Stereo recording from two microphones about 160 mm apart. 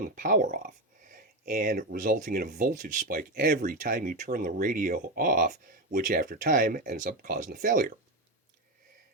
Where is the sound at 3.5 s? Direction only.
50° right (ahead or behind).